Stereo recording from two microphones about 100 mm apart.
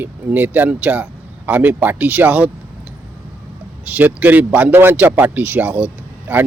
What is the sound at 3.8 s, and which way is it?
Speech, 15° right (ahead or behind).